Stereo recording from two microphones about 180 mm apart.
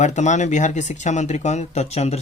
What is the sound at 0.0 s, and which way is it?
Speech, 40° left (ahead or behind).